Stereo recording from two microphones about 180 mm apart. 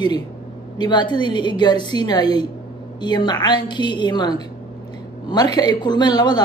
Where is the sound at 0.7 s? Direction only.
25° left (ahead or behind).